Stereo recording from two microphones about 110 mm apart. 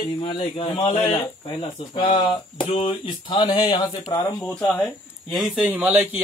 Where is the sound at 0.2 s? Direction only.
50° left (ahead or behind).